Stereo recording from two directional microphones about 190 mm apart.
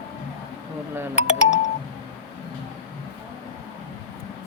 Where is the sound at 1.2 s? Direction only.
35° left (ahead or behind).